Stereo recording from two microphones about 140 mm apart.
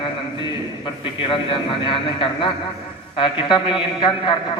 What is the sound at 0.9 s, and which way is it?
A man's voice, 40° left (ahead or behind).